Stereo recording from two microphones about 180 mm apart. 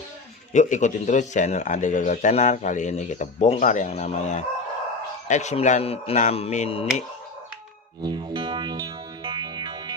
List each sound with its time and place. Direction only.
0.5 s speech: 40° left (ahead or behind)
8.0 s music: 25° right (ahead or behind)